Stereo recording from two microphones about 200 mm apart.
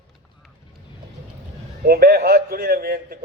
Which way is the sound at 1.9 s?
50° right (ahead or behind).